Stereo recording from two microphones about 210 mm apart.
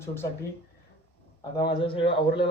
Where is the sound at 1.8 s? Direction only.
25° left (ahead or behind).